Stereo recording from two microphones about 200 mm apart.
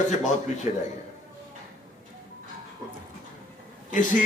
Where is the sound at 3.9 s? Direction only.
40° left (ahead or behind).